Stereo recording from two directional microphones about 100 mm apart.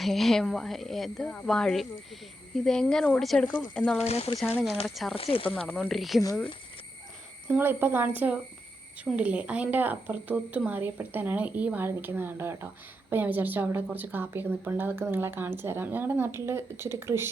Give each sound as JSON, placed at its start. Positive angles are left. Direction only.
{"t": 0.0, "sound": "speech", "side_deg": 0}
{"t": 4.0, "sound": "speech", "side_deg": 85}
{"t": 5.1, "sound": "speech", "side_deg": 70}
{"t": 5.5, "sound": "speech", "side_deg": 5}
{"t": 7.4, "sound": "a woman's voice", "side_deg": -20}